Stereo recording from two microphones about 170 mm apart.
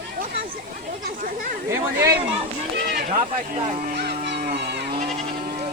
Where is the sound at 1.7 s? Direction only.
15° right (ahead or behind).